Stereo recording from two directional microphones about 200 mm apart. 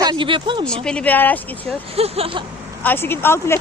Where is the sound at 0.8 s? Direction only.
5° left (ahead or behind).